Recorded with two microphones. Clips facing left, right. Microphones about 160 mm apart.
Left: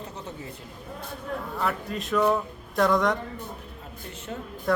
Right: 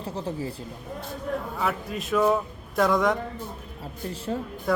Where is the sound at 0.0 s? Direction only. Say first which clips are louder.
Right 7 dB; 30° right (ahead or behind).